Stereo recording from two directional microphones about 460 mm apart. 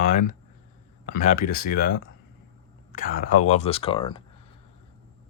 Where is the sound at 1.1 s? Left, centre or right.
Centre.